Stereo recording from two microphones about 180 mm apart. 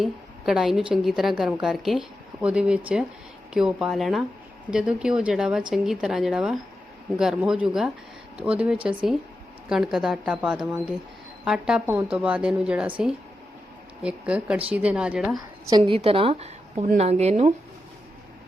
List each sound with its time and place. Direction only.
0.0 s a woman's voice: centre (ahead or behind)
14.0 s a woman's voice: 5° right (ahead or behind)
15.7 s a woman's voice: 30° right (ahead or behind)